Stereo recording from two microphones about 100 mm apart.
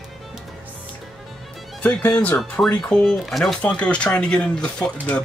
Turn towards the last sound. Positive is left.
turn(degrees=10)  # may be behind; listen again after turning